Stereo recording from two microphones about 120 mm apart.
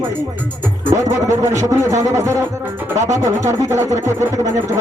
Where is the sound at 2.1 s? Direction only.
25° right (ahead or behind).